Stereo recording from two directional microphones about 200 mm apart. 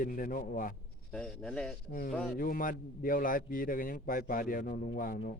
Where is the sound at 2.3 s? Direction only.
45° left (ahead or behind).